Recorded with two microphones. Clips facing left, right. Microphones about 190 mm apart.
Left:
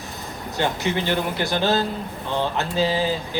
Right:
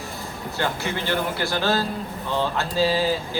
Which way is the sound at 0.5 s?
20° left (ahead or behind).